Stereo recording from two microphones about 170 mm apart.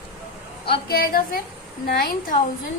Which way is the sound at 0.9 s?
60° left (ahead or behind).